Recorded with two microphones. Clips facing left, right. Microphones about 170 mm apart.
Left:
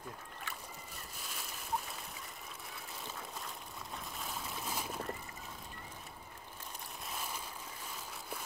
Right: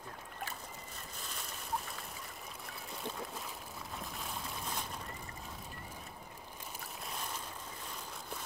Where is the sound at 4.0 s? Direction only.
Centre (ahead or behind).